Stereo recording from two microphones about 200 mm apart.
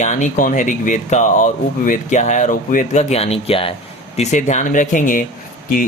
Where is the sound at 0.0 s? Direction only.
40° left (ahead or behind).